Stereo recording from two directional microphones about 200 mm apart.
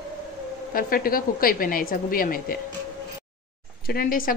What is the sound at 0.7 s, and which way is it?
Speech, 45° left (ahead or behind).